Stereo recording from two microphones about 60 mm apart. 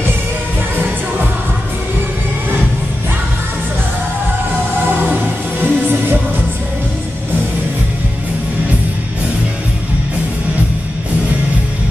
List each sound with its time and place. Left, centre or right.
5.0 s music: right